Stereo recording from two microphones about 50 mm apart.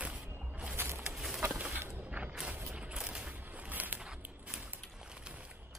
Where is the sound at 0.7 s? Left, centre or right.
Right.